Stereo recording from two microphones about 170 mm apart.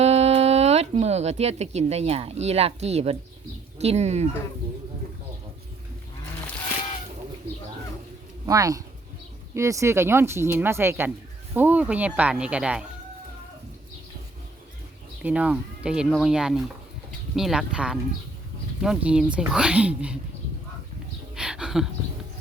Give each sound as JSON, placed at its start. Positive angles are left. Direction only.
{"t": 0.0, "sound": "speech", "side_deg": -40}
{"t": 8.4, "sound": "speech", "side_deg": -20}
{"t": 15.2, "sound": "speech", "side_deg": -5}
{"t": 21.3, "sound": "a sound", "side_deg": -5}